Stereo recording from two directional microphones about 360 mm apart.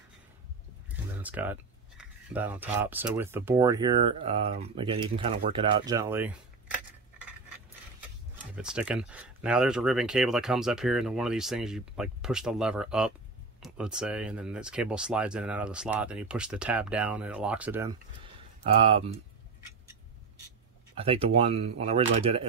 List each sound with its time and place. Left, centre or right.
0.8 s speech: centre
8.5 s speech: centre
20.9 s speech: centre